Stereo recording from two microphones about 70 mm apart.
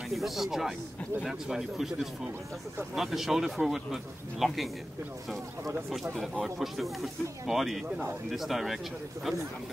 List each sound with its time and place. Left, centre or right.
0.1 s speech: centre
6.1 s speech: centre